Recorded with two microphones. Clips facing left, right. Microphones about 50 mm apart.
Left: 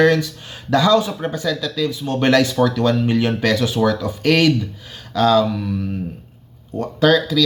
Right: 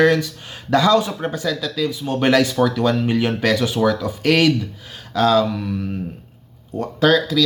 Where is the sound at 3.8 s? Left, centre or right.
Centre.